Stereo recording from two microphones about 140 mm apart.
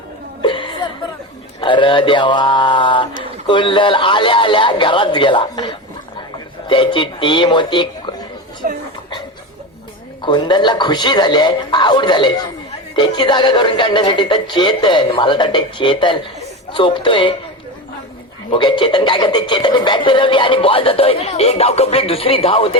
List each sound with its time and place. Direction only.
0.4 s music: 35° left (ahead or behind)
1.6 s speech: 35° left (ahead or behind)
8.6 s a sound: 80° right
10.2 s speech: 30° left (ahead or behind)
18.5 s speech: 35° left (ahead or behind)